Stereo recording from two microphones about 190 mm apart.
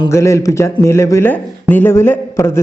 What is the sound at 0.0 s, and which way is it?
A man's voice, 15° left (ahead or behind).